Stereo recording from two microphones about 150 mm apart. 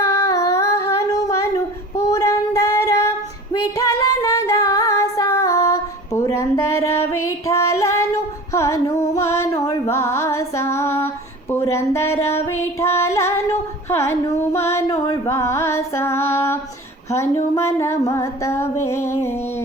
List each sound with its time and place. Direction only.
0.1 s humming: 20° left (ahead or behind)
3.5 s female singing: 20° left (ahead or behind)
8.5 s music: 20° left (ahead or behind)
17.1 s female singing: 20° left (ahead or behind)